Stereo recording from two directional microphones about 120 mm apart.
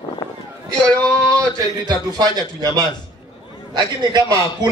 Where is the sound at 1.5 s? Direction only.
30° right (ahead or behind).